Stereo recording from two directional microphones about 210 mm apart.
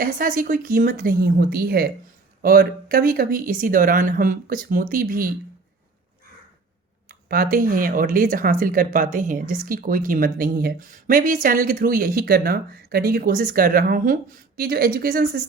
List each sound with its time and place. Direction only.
0.0 s speech: 40° right (ahead or behind)
7.1 s speech: 45° right (ahead or behind)